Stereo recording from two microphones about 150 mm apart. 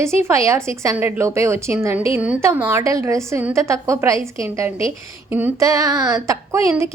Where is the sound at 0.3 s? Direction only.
20° right (ahead or behind).